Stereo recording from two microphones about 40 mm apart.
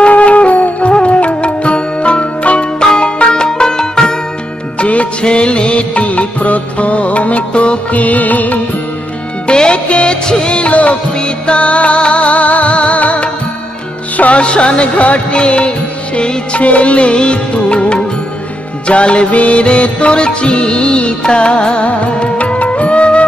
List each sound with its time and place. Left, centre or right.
0.1 s music: left; by 4.2 s centre
4.7 s music: left
9.5 s music: left
14.4 s music: left